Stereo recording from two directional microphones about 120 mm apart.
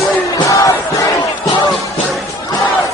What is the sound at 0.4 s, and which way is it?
Crowd, 25° left (ahead or behind).